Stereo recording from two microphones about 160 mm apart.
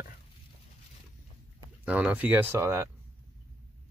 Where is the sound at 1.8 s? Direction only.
10° right (ahead or behind).